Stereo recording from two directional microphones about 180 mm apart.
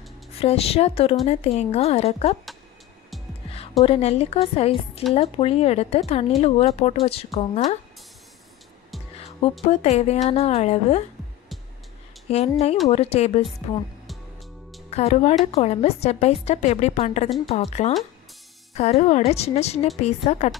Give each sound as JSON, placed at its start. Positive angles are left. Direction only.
{"t": 0.4, "sound": "speech", "side_deg": 35}
{"t": 3.8, "sound": "speech", "side_deg": 35}
{"t": 9.2, "sound": "speech", "side_deg": 35}
{"t": 12.3, "sound": "speech", "side_deg": 35}
{"t": 14.9, "sound": "speech", "side_deg": 35}